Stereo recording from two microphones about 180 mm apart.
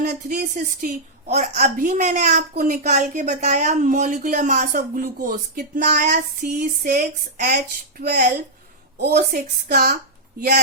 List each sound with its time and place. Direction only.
0.0 s a woman's voice: 45° right (ahead or behind)